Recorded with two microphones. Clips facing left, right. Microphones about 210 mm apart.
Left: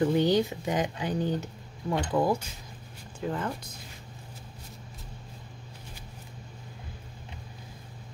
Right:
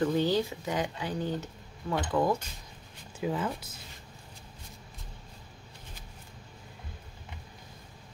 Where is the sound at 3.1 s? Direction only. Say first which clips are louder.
Right 1 dB; 5° right (ahead or behind).